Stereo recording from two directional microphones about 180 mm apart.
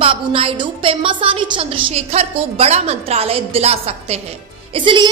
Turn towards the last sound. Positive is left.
turn(degrees=-25)  # may be behind; listen again after turning